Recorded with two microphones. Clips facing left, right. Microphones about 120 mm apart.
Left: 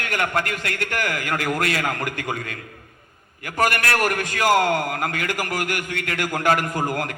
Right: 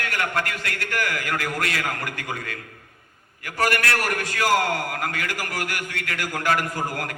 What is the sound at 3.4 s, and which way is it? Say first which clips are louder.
A man's voice: left 2 dB; 20° left (ahead or behind).